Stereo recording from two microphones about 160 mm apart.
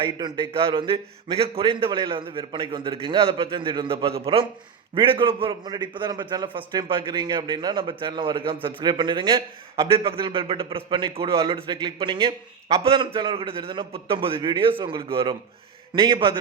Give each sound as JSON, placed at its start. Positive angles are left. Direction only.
{"t": 0.0, "sound": "a man's voice", "side_deg": -30}